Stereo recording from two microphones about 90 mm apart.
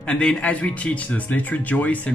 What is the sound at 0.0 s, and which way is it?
Speech, 10° left (ahead or behind).